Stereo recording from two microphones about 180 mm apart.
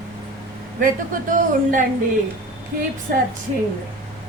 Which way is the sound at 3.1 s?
55° right (ahead or behind).